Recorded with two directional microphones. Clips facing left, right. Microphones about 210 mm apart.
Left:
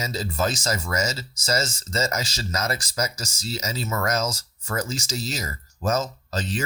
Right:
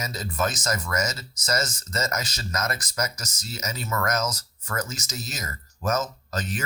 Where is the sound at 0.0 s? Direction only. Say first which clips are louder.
Left 2 dB; 30° left (ahead or behind).